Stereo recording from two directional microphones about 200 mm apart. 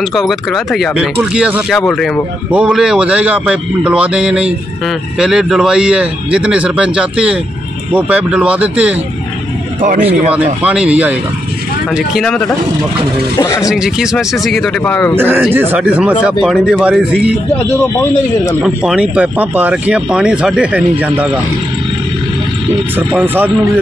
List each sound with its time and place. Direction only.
0.1 s speech: centre (ahead or behind)
9.8 s a man's voice: 40° right (ahead or behind)
10.0 s speech: 5° right (ahead or behind)
13.6 s speech: centre (ahead or behind)
15.1 s speech: 10° right (ahead or behind)
18.6 s speech: 5° right (ahead or behind)
22.9 s speech: 10° right (ahead or behind)